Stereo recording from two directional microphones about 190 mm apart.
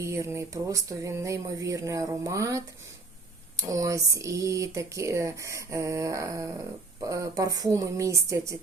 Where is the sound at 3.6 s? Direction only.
15° right (ahead or behind).